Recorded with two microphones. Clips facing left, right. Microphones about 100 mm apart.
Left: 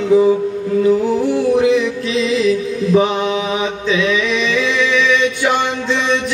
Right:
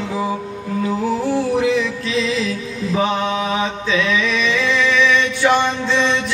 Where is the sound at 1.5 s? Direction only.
20° left (ahead or behind).